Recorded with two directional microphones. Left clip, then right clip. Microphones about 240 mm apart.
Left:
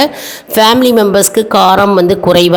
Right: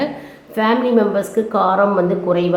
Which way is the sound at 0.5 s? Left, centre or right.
Left.